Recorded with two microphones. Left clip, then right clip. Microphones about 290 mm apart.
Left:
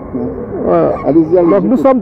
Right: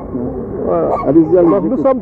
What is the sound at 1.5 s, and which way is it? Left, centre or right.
Speech, left.